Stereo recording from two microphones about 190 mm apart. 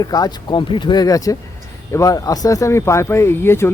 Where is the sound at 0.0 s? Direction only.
20° left (ahead or behind).